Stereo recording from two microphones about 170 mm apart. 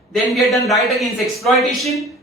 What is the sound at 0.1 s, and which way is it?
Speech, centre (ahead or behind).